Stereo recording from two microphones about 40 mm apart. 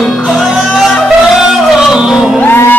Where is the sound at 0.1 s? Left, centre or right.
Centre.